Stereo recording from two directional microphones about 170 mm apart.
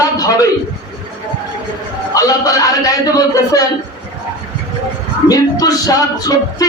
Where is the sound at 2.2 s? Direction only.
20° left (ahead or behind).